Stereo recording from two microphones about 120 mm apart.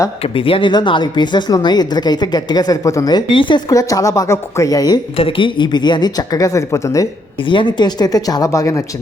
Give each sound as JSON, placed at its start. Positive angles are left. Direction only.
{"t": 0.2, "sound": "speech", "side_deg": 50}
{"t": 3.7, "sound": "a woman's voice", "side_deg": 30}
{"t": 5.1, "sound": "speech", "side_deg": 45}
{"t": 7.4, "sound": "speech", "side_deg": 40}